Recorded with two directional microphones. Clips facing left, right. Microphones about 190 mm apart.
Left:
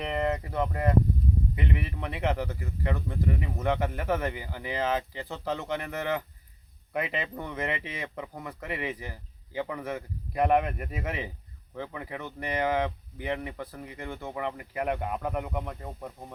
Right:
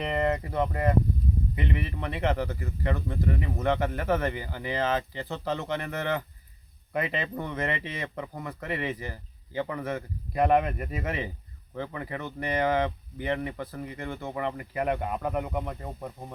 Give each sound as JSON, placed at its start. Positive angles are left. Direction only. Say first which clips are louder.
{"t": 0.0, "sound": "speech", "louder": "right 2 dB", "side_deg": 0}